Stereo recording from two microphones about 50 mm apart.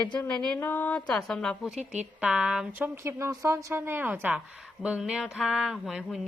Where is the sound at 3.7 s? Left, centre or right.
Right.